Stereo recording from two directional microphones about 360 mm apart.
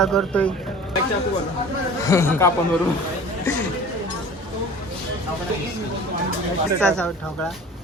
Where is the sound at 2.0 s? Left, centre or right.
Centre.